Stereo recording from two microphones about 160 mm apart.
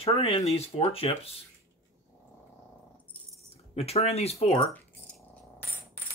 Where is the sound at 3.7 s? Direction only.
40° left (ahead or behind).